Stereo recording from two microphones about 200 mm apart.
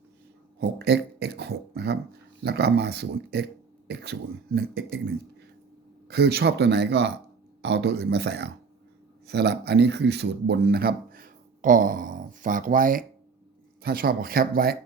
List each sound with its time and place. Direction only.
0.6 s speech: 55° right (ahead or behind)
6.1 s speech: 55° right (ahead or behind)